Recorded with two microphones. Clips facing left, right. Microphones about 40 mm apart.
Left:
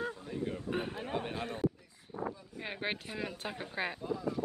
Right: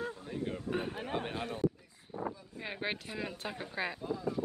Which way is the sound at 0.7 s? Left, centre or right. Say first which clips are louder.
Right 2 dB; centre.